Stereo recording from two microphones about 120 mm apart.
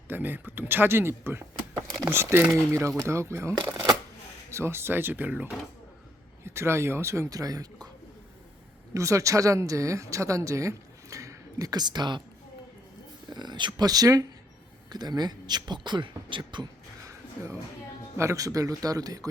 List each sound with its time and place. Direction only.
0.1 s speech: 15° right (ahead or behind)
4.5 s speech: 20° right (ahead or behind)
8.9 s speech: 25° right (ahead or behind)
13.3 s speech: 40° right (ahead or behind)
18.2 s speech: 25° right (ahead or behind)